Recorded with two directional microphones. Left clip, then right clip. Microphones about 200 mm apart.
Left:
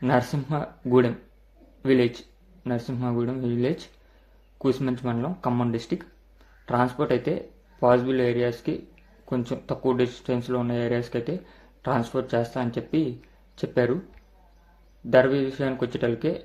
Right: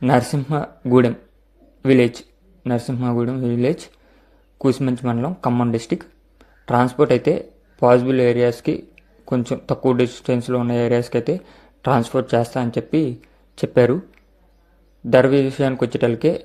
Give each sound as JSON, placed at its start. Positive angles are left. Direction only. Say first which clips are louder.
{"t": 0.0, "sound": "speech", "louder": "right 6 dB", "side_deg": -30}
{"t": 15.1, "sound": "speech", "louder": "right 5 dB", "side_deg": -35}